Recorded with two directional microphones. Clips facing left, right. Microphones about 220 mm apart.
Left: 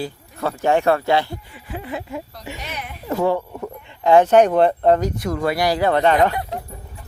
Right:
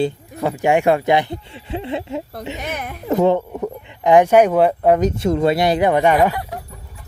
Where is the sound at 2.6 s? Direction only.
50° right (ahead or behind).